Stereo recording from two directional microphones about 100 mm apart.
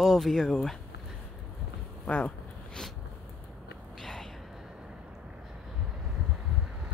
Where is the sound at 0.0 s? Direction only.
Centre (ahead or behind).